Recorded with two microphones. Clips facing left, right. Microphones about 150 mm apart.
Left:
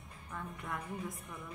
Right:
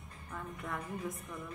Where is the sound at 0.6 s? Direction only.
Centre (ahead or behind).